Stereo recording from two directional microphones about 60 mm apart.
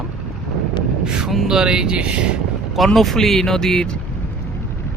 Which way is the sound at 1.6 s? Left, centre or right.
Centre.